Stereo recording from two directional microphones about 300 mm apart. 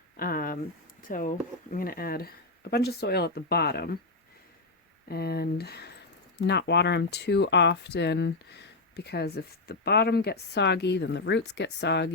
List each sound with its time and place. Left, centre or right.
0.2 s a sound: left
1.0 s speech: left
5.0 s speech: left